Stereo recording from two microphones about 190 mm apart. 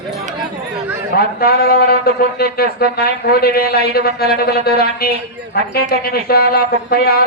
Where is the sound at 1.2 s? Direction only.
55° left (ahead or behind).